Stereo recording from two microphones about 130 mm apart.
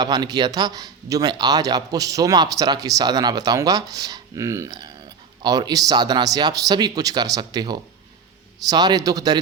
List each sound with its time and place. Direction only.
0.0 s a man's voice: 30° right (ahead or behind)
4.8 s speech: 35° right (ahead or behind)